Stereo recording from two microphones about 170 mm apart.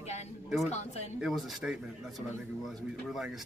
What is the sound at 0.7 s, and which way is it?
Speech, 40° left (ahead or behind).